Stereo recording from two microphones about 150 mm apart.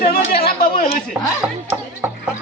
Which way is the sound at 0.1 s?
85° left.